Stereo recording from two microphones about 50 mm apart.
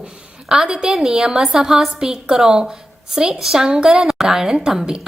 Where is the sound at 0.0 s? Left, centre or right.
Centre.